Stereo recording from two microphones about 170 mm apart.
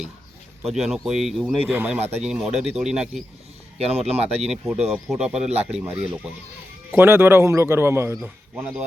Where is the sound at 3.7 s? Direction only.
35° right (ahead or behind).